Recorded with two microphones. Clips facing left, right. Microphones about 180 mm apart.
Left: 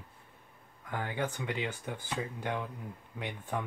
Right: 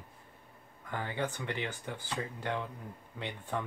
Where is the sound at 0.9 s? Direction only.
10° left (ahead or behind).